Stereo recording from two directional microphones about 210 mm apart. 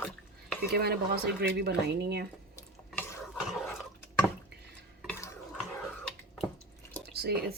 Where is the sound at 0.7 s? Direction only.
50° right (ahead or behind).